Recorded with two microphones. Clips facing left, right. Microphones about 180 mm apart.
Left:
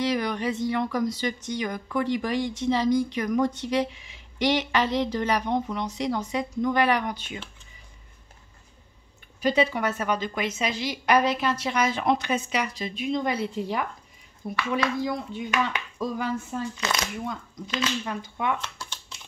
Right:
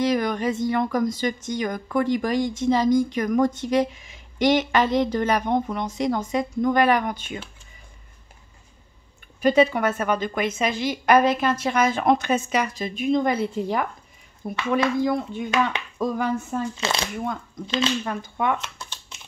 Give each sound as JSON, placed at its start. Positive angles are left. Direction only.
{"t": 0.0, "sound": "speech", "side_deg": -50}
{"t": 9.4, "sound": "speech", "side_deg": -50}
{"t": 16.7, "sound": "speech", "side_deg": -30}
{"t": 17.2, "sound": "speech", "side_deg": -55}